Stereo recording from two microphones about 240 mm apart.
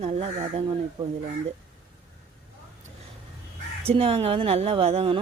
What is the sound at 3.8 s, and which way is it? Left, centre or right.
Speech, right.